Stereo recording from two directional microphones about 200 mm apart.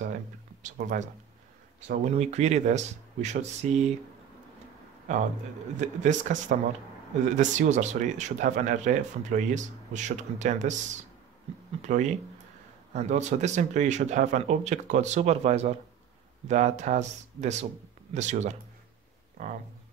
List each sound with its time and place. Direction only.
0.0 s a sound: 40° right (ahead or behind)
1.9 s speech: 35° right (ahead or behind)
5.8 s speech: 35° right (ahead or behind)